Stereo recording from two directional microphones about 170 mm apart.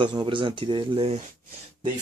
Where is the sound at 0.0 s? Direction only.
25° right (ahead or behind).